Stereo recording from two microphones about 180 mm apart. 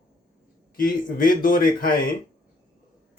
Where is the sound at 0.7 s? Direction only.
50° left (ahead or behind).